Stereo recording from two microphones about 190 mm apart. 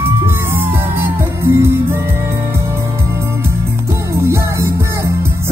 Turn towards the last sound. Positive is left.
turn(degrees=-15)  # may be behind; listen again after turning